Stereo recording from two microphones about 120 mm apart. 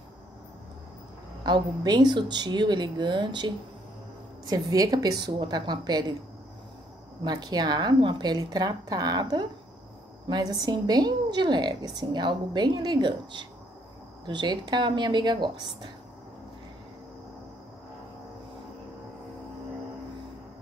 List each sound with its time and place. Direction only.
1.4 s a woman's voice: 35° right (ahead or behind)
7.2 s a woman's voice: 35° right (ahead or behind)